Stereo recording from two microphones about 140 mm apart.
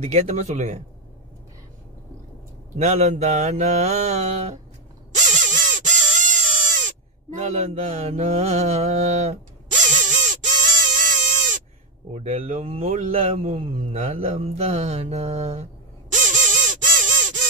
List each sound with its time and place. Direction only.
0.0 s mantra: 50° right (ahead or behind)
2.8 s mantra: 55° right (ahead or behind)
5.1 s crow: 65° right (ahead or behind)
7.4 s mantra: 50° right (ahead or behind); by 10.4 s 65° right (ahead or behind)
10.9 s a sound: 65° right (ahead or behind)
12.1 s mantra: 50° right (ahead or behind)
13.6 s mantra: 40° right (ahead or behind); by 17.4 s 65° right (ahead or behind)